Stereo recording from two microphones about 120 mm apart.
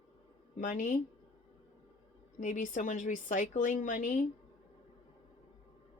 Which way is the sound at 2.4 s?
90° left.